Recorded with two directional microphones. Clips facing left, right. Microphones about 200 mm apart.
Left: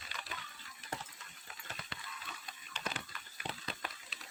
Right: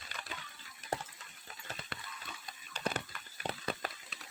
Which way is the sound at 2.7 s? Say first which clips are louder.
Right 6 dB; 35° right (ahead or behind).